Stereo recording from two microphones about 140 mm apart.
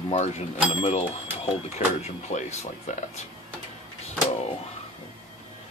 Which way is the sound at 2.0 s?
55° left (ahead or behind).